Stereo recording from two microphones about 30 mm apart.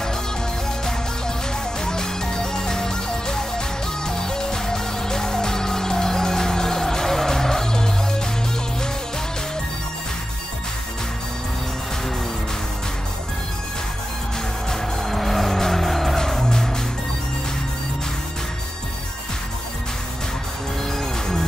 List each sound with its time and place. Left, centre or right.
0.7 s music: left
15.0 s vehicle: centre
16.2 s vehicle: centre